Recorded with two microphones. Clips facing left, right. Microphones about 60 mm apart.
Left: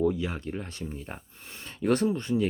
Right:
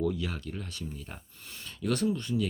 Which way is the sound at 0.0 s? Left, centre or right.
Left.